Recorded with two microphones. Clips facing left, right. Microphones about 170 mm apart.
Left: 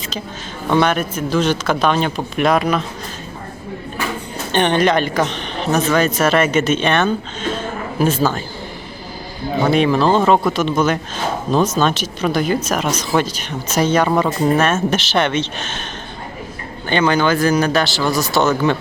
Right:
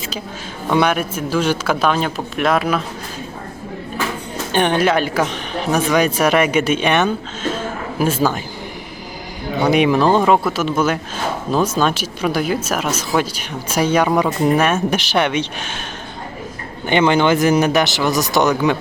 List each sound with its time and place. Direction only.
0.7 s speech: 10° right (ahead or behind)
4.5 s speech: 5° right (ahead or behind)
7.5 s a sound: 10° right (ahead or behind)
9.6 s speech: 15° right (ahead or behind)
16.9 s speech: 20° right (ahead or behind)